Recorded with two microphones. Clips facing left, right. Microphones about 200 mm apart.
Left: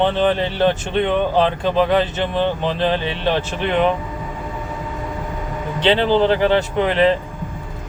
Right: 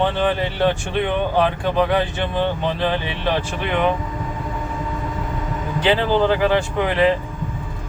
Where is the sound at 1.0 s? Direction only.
25° left (ahead or behind).